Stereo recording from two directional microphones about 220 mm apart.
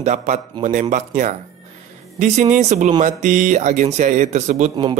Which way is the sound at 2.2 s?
35° right (ahead or behind).